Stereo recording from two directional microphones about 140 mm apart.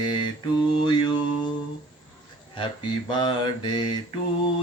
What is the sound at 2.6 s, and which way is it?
Mantra, 35° left (ahead or behind).